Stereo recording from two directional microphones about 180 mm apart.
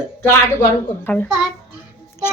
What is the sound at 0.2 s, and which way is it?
Speech, 15° left (ahead or behind).